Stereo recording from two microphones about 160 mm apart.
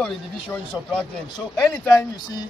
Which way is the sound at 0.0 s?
5° left (ahead or behind).